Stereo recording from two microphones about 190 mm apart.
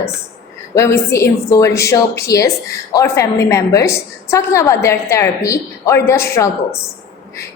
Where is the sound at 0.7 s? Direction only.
15° left (ahead or behind).